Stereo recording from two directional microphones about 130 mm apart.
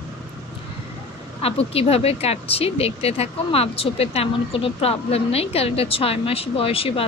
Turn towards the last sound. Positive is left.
turn(degrees=45)  # may be behind; listen again after turning